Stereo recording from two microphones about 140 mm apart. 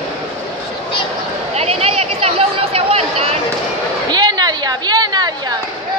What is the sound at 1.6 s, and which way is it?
Chatter, 50° right (ahead or behind).